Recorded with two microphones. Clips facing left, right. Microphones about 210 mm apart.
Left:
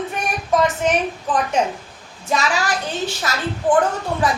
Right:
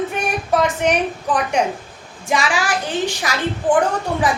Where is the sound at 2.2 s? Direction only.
15° right (ahead or behind).